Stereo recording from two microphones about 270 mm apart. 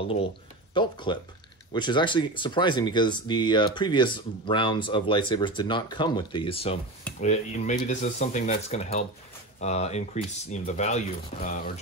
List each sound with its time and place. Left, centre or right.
0.0 s speech: left